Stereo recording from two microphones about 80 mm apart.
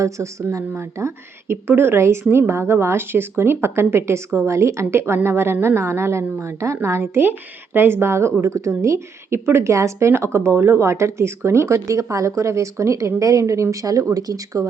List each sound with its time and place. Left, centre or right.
0.0 s speech: right